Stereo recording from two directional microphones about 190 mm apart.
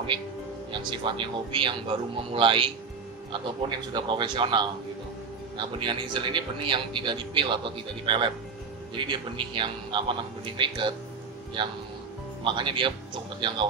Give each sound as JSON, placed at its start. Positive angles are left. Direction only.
{"t": 0.7, "sound": "a man's voice", "side_deg": -25}
{"t": 5.8, "sound": "a man's voice", "side_deg": -25}
{"t": 8.9, "sound": "a man's voice", "side_deg": -25}
{"t": 12.4, "sound": "a man's voice", "side_deg": -25}